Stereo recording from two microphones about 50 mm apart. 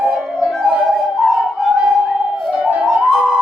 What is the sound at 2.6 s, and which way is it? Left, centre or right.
Music, centre.